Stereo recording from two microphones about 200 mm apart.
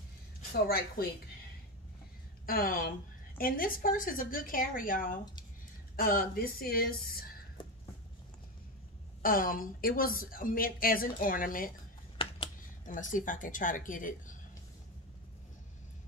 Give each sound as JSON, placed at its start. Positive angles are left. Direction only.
{"t": 0.7, "sound": "a woman's voice", "side_deg": 50}
{"t": 2.4, "sound": "a woman's voice", "side_deg": 45}
{"t": 7.6, "sound": "a sound", "side_deg": 25}
{"t": 9.2, "sound": "a woman's voice", "side_deg": 45}
{"t": 12.2, "sound": "finger snapping", "side_deg": 25}
{"t": 12.8, "sound": "speech", "side_deg": 40}